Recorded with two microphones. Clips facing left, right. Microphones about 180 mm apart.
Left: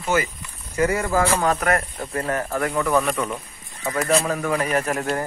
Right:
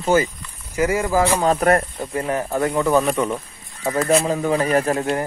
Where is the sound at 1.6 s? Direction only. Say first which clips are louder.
Right 5 dB; 30° right (ahead or behind).